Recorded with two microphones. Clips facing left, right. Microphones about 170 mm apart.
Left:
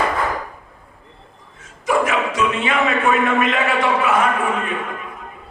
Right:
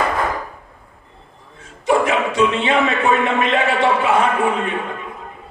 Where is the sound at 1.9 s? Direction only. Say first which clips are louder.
Right 2 dB; 30° right (ahead or behind).